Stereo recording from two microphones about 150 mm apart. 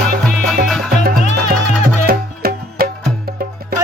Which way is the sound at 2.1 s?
90° right.